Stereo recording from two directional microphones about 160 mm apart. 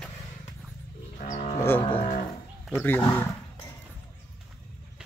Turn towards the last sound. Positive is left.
turn(degrees=15)  # may be behind; listen again after turning